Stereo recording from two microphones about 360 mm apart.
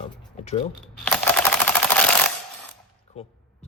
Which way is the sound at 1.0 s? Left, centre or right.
Centre.